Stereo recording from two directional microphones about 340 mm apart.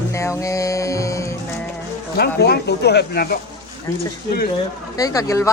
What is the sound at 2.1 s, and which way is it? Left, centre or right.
Speech, left.